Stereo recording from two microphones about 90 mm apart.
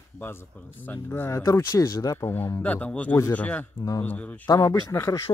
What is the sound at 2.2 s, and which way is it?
Speech, 25° left (ahead or behind).